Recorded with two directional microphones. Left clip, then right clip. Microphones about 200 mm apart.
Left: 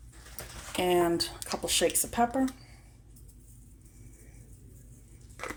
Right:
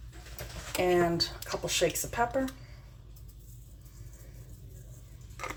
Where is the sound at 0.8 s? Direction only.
45° left (ahead or behind).